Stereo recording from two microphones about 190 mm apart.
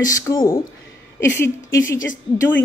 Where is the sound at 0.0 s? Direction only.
20° left (ahead or behind).